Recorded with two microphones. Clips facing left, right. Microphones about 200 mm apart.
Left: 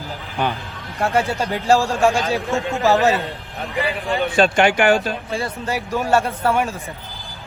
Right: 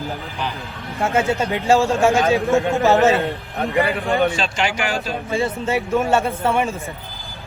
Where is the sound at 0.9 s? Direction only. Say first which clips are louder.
Right 1 dB; centre (ahead or behind).